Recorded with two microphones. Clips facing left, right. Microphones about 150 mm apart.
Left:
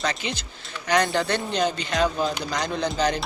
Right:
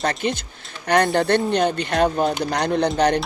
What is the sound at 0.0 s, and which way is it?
Speech, 50° right (ahead or behind).